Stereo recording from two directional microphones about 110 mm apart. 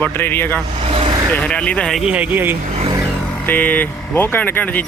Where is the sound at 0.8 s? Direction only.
60° right (ahead or behind).